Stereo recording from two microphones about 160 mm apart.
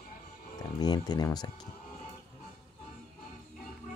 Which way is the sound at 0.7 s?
25° left (ahead or behind).